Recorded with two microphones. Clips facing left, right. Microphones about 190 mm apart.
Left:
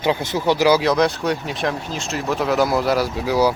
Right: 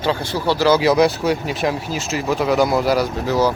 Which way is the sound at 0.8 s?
5° right (ahead or behind).